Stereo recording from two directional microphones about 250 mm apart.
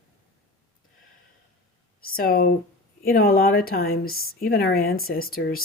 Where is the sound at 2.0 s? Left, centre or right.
Left.